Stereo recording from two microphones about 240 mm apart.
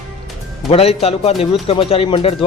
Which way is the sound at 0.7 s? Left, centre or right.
Left.